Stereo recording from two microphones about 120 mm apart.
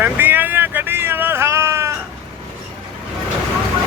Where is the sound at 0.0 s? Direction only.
15° right (ahead or behind).